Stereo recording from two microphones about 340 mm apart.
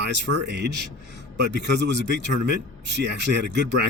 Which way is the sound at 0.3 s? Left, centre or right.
Right.